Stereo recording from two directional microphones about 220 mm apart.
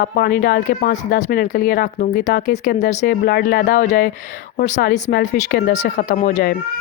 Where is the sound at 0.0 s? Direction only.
40° left (ahead or behind).